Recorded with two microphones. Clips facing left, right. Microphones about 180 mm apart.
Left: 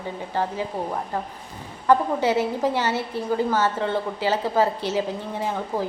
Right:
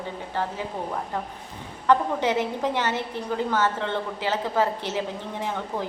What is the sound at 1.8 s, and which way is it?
A woman's voice, 10° left (ahead or behind).